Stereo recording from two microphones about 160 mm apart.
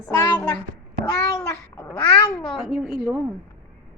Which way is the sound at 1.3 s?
20° left (ahead or behind).